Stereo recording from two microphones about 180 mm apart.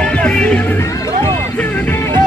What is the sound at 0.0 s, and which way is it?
Music, 5° left (ahead or behind).